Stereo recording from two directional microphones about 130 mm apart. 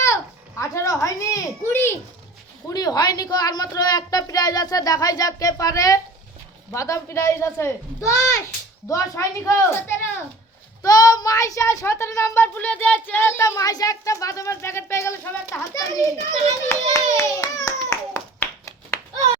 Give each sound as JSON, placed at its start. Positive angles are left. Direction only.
{"t": 0.5, "sound": "a sound", "side_deg": 20}
{"t": 2.6, "sound": "a child's voice", "side_deg": 30}
{"t": 16.6, "sound": "clapping", "side_deg": 25}